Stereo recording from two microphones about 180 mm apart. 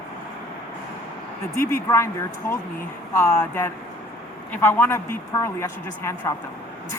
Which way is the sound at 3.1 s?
15° left (ahead or behind).